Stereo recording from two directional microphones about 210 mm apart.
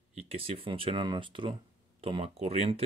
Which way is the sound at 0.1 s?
30° right (ahead or behind).